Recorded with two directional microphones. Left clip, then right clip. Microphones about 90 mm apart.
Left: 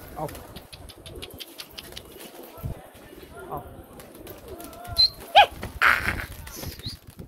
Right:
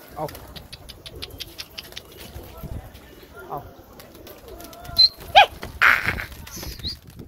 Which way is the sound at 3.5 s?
30° right (ahead or behind).